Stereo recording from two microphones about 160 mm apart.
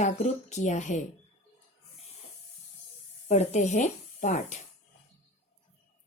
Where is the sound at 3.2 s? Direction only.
45° left (ahead or behind).